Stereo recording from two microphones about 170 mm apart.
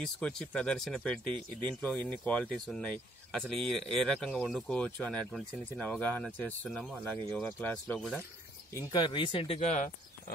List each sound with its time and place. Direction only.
0.0 s speech: 5° left (ahead or behind)
8.7 s speech: 25° left (ahead or behind); by 9.8 s 40° left (ahead or behind)